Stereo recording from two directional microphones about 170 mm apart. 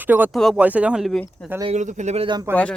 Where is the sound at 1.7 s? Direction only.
45° right (ahead or behind).